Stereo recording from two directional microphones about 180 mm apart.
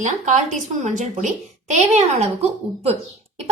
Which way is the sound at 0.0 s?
40° right (ahead or behind).